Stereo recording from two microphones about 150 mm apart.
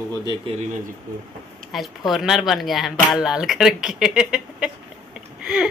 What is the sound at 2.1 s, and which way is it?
Speech, centre (ahead or behind).